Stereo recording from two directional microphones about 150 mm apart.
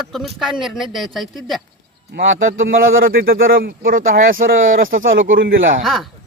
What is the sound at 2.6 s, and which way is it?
Speech, 75° right (ahead or behind).